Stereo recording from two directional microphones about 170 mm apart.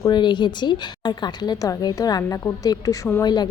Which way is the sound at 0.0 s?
25° left (ahead or behind).